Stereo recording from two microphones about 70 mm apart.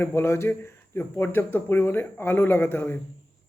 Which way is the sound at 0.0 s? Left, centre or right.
Left.